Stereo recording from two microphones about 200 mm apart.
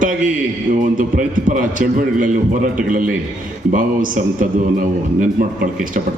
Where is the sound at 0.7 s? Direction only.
40° right (ahead or behind).